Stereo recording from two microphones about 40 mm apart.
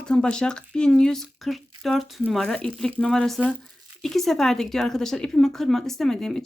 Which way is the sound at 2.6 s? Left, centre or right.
Left.